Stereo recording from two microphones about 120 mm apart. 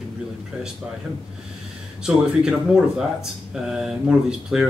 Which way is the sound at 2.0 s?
5° right (ahead or behind).